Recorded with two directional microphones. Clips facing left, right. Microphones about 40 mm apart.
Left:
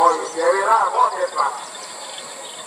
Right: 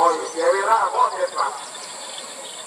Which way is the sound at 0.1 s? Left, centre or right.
Left.